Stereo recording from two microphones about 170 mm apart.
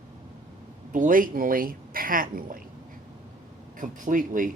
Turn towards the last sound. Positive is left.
turn(degrees=-50)  # may be behind; listen again after turning